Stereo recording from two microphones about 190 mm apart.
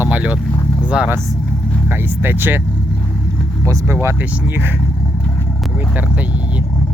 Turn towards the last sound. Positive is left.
turn(degrees=-10)  # may be behind; listen again after turning